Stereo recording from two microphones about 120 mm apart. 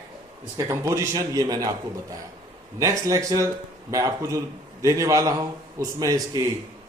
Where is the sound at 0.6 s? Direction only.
25° right (ahead or behind).